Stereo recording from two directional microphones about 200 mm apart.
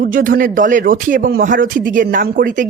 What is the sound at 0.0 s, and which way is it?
Speech, 45° right (ahead or behind).